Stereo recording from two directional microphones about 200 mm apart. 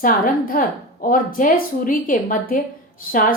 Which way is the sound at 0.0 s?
45° left (ahead or behind).